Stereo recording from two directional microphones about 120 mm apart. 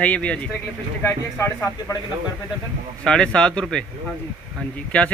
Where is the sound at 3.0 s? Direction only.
5° left (ahead or behind).